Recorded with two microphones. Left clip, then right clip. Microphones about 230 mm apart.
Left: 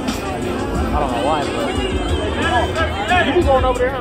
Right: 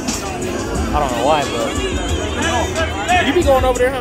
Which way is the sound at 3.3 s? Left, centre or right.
Right.